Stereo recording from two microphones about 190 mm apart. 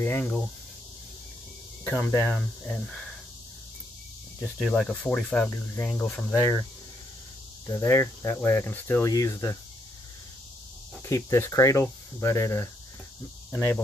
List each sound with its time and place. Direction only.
0.0 s speech: 10° left (ahead or behind)
1.9 s speech: 10° left (ahead or behind)
4.6 s speech: 5° left (ahead or behind)
7.6 s speech: 15° left (ahead or behind)
11.1 s speech: 15° left (ahead or behind)